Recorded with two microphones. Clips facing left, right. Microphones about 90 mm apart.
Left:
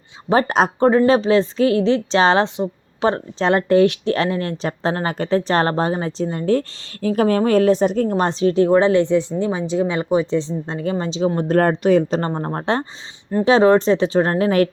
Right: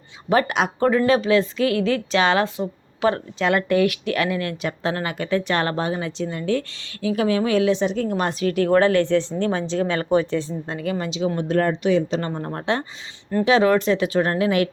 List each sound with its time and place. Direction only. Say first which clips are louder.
0.3 s speech: left 3 dB; 35° left (ahead or behind)